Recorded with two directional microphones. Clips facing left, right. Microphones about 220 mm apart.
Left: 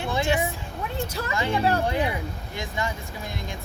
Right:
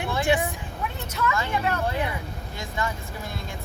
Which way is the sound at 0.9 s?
30° left (ahead or behind).